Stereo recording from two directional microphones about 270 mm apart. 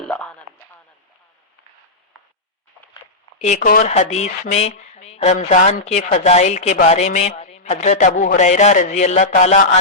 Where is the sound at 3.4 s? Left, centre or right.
Left.